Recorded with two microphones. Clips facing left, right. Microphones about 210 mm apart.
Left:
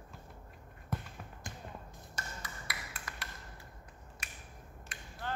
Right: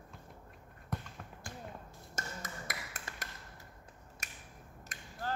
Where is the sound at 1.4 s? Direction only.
20° left (ahead or behind).